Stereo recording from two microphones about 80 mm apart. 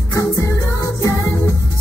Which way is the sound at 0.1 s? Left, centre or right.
Left.